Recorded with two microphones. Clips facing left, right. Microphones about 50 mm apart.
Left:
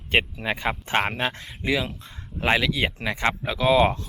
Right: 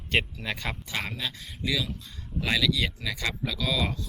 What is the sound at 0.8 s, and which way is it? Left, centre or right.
Speech, left.